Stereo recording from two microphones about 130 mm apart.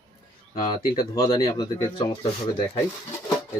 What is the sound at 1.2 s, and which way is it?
Speech, 40° left (ahead or behind).